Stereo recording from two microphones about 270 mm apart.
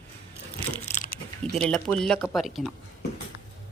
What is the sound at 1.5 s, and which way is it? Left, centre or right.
Speech, centre.